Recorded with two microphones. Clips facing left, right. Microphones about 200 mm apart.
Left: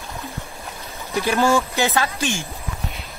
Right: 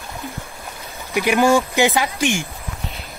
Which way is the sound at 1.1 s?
15° right (ahead or behind).